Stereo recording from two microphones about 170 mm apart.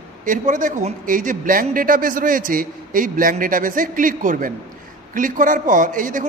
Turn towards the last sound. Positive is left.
turn(degrees=-50)  # may be behind; listen again after turning